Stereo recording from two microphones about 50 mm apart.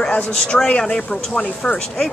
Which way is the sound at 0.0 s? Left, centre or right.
Centre.